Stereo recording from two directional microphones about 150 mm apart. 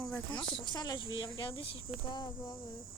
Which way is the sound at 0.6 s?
25° left (ahead or behind).